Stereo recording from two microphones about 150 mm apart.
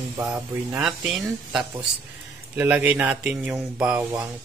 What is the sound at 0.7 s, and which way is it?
Speech, 5° right (ahead or behind).